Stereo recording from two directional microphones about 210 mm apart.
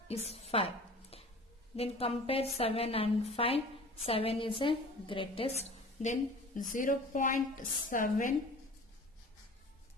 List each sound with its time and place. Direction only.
0.1 s a sound: 30° left (ahead or behind)
1.8 s a woman's voice: 30° left (ahead or behind)
6.7 s a woman's voice: 40° left (ahead or behind)